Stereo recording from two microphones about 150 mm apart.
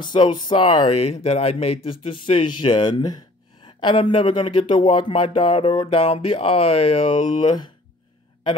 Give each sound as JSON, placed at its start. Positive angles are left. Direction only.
{"t": 0.0, "sound": "speech", "side_deg": 30}